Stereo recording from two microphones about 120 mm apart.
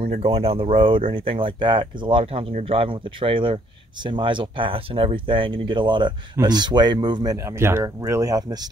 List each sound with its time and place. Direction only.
0.0 s speech: 60° right (ahead or behind); by 7.3 s 40° right (ahead or behind)
7.3 s speech: 20° right (ahead or behind)